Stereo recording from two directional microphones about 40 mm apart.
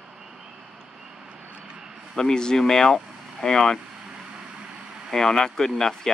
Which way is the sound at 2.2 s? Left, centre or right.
Centre.